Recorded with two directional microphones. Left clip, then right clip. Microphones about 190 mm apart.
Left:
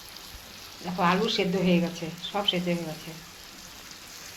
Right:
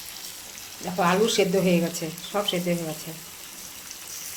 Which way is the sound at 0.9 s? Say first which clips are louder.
Right 4 dB; 50° right (ahead or behind).